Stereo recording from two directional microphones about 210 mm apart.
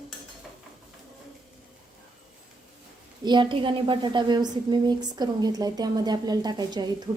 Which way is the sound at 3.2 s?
25° right (ahead or behind).